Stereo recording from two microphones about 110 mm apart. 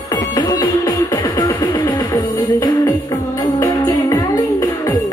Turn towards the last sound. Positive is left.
turn(degrees=35)  # may be behind; listen again after turning